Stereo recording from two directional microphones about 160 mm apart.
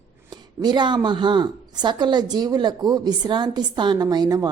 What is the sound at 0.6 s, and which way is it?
A woman's voice, 25° right (ahead or behind).